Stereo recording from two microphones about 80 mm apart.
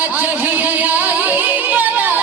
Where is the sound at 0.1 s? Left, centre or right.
Right.